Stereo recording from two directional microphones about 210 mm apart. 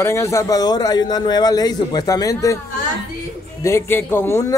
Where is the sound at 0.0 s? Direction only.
15° left (ahead or behind).